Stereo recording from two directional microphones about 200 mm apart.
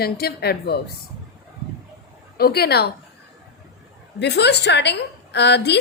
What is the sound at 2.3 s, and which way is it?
Speech, 50° left (ahead or behind).